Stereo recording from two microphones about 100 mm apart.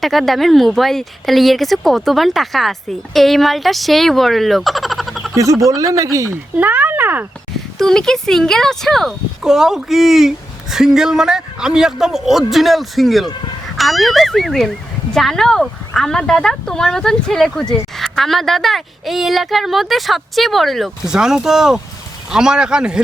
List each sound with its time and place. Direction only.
0.0 s speech: centre (ahead or behind)
5.3 s speech: 30° right (ahead or behind)
6.6 s a sound: 15° right (ahead or behind)
7.8 s speech: 5° left (ahead or behind)